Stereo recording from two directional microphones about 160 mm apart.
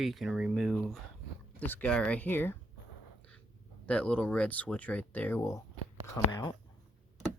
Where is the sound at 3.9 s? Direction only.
10° left (ahead or behind).